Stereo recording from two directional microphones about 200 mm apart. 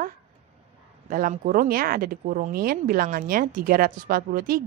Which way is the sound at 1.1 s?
40° right (ahead or behind).